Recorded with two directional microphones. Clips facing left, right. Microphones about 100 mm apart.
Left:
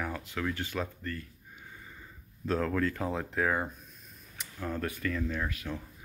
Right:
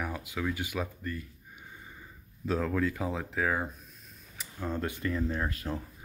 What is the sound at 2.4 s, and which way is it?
Speech, 5° right (ahead or behind).